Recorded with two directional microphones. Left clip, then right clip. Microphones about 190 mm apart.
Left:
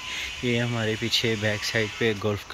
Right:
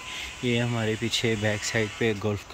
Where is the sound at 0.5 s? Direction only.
10° right (ahead or behind).